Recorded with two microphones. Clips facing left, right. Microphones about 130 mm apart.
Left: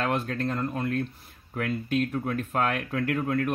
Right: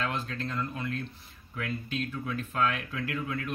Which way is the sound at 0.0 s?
55° left (ahead or behind).